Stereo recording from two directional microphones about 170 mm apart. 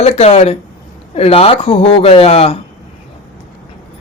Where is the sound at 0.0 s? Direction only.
40° left (ahead or behind).